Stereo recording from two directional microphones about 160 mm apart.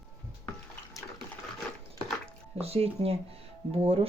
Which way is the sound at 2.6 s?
40° right (ahead or behind).